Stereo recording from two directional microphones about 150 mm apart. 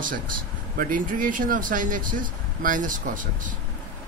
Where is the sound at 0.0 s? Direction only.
65° right (ahead or behind).